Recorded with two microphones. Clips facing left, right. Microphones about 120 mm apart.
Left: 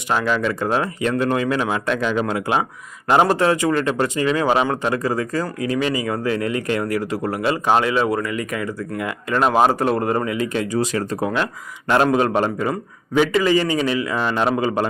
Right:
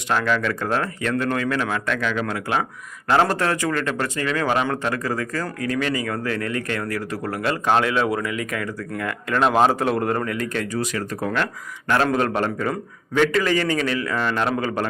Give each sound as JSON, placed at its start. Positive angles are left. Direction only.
{"t": 0.1, "sound": "speech", "side_deg": 10}
{"t": 10.8, "sound": "speech", "side_deg": 30}
{"t": 11.9, "sound": "speech", "side_deg": 15}